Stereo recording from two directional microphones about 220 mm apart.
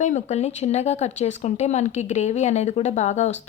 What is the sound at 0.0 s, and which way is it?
Speech, 30° left (ahead or behind).